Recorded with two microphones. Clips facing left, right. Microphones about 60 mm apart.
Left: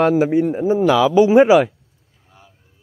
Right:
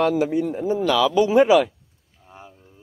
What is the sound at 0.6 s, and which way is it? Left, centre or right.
Speech, centre.